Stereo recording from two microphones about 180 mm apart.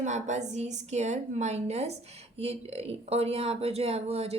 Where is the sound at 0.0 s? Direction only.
40° right (ahead or behind).